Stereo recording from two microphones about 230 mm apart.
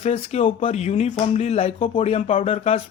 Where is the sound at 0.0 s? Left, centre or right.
Left.